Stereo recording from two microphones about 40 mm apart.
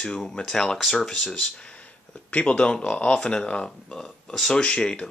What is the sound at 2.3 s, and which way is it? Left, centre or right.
Speech, left.